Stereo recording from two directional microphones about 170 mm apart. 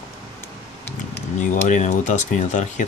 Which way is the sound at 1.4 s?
45° left (ahead or behind).